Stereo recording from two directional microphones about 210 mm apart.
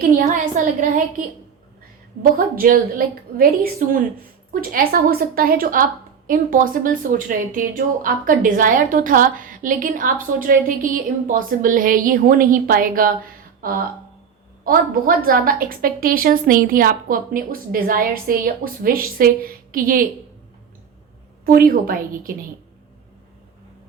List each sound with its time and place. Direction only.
0.5 s a woman's voice: 40° right (ahead or behind)
2.6 s a woman's voice: 40° right (ahead or behind)
21.4 s a woman's voice: 45° right (ahead or behind)